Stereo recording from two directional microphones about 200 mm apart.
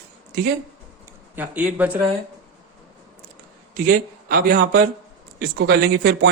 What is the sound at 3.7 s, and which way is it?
A man's voice, 45° right (ahead or behind).